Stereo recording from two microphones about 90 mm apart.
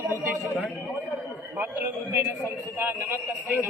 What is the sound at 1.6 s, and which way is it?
A man's voice, 25° right (ahead or behind).